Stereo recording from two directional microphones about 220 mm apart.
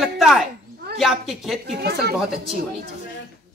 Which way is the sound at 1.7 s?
45° right (ahead or behind).